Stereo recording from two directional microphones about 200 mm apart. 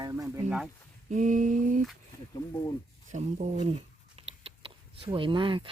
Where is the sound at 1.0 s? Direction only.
40° right (ahead or behind).